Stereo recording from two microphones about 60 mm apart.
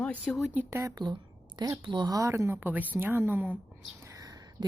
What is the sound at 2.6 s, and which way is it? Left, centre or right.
Speech, right.